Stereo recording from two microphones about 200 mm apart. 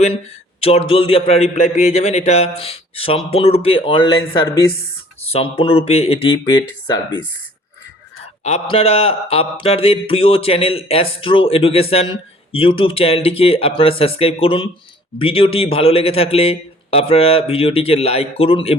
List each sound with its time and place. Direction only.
0.6 s a man's voice: 30° left (ahead or behind)
5.3 s a man's voice: 30° left (ahead or behind)
6.4 s speech: 15° left (ahead or behind)
8.7 s a man's voice: 30° left (ahead or behind)